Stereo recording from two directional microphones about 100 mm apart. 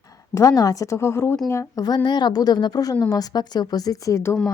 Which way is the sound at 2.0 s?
45° left (ahead or behind).